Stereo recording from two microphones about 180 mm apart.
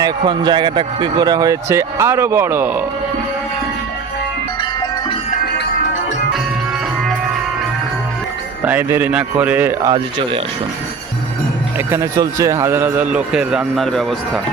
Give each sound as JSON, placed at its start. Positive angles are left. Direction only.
{"t": 0.0, "sound": "speech", "side_deg": -25}
{"t": 8.6, "sound": "a man's voice", "side_deg": -10}
{"t": 9.9, "sound": "speech", "side_deg": -30}
{"t": 11.9, "sound": "a man's voice", "side_deg": -15}